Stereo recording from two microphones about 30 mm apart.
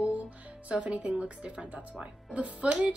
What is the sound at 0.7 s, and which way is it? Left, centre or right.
A woman's voice, right.